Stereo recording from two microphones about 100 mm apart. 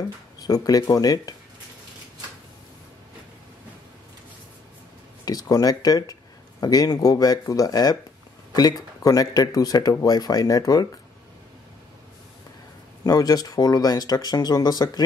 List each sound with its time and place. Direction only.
0.4 s speech: 40° left (ahead or behind)
5.2 s speech: 40° left (ahead or behind)
13.0 s speech: 40° left (ahead or behind)